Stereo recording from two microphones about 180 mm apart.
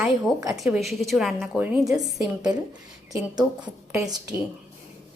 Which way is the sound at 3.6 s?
20° right (ahead or behind).